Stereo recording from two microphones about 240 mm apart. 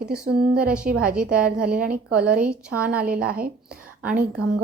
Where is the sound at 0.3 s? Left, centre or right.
Right.